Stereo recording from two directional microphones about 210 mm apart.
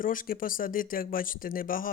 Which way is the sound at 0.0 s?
40° left (ahead or behind).